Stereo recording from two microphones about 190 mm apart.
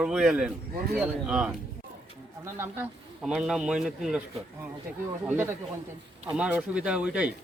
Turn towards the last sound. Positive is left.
turn(degrees=-5)  # may be behind; listen again after turning